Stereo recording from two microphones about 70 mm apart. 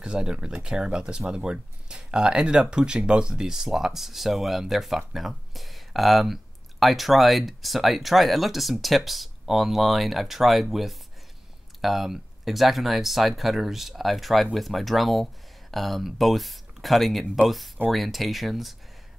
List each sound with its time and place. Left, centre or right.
0.0 s speech: centre